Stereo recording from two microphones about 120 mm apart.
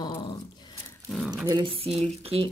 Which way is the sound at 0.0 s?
35° left (ahead or behind).